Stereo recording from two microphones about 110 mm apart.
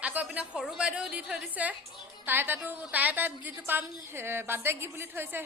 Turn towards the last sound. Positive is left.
turn(degrees=-20)  # may be behind; listen again after turning